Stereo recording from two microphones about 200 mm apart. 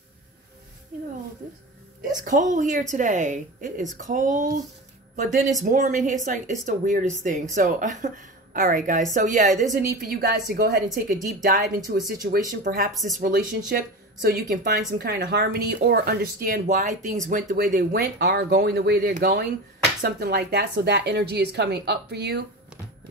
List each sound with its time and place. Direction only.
2.2 s a woman's voice: 40° right (ahead or behind)
12.9 s speech: centre (ahead or behind)
13.2 s speech: 50° right (ahead or behind)